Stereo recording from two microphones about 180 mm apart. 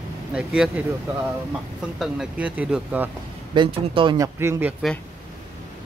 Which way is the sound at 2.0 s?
5° right (ahead or behind).